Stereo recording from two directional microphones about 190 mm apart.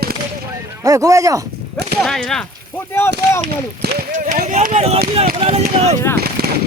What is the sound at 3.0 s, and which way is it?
Speech, 10° left (ahead or behind).